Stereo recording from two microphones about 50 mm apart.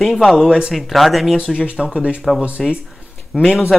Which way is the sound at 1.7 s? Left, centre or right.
Centre.